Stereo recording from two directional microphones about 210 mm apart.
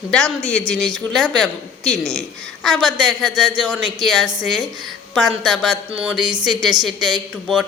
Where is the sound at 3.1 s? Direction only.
Centre (ahead or behind).